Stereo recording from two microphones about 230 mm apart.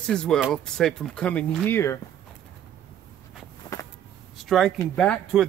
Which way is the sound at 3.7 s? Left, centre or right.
Centre.